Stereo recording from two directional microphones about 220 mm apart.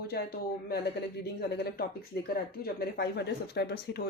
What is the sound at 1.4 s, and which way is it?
Speech, 45° left (ahead or behind).